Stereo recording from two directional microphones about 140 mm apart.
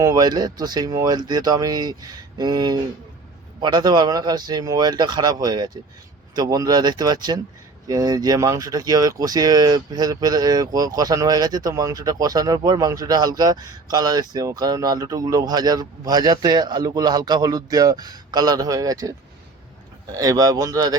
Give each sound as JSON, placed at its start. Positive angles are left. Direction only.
{"t": 0.0, "sound": "speech", "side_deg": -30}
{"t": 20.1, "sound": "speech", "side_deg": -25}